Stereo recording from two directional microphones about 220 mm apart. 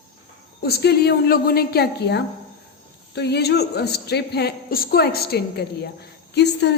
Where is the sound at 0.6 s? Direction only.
45° left (ahead or behind).